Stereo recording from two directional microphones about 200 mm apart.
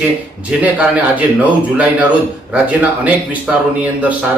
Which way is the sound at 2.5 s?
5° right (ahead or behind).